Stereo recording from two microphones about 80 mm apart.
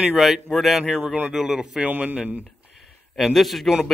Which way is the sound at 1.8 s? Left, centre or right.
Centre.